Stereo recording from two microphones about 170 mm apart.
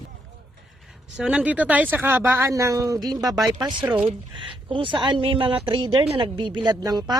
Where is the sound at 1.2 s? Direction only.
5° right (ahead or behind); by 3.4 s 20° right (ahead or behind).